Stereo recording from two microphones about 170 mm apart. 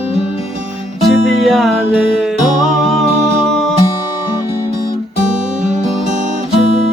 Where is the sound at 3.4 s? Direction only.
Centre (ahead or behind).